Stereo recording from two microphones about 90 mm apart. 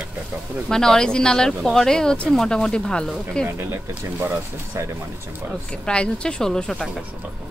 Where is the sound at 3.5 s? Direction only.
25° right (ahead or behind).